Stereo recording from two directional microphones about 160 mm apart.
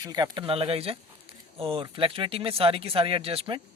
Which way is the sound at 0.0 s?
25° right (ahead or behind).